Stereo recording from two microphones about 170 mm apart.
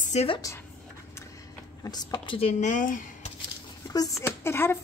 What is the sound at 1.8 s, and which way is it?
Speech, 25° left (ahead or behind).